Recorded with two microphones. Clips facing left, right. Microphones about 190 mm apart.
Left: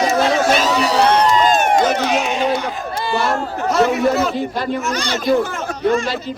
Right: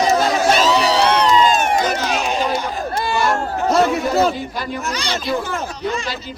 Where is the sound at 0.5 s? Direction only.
50° left (ahead or behind).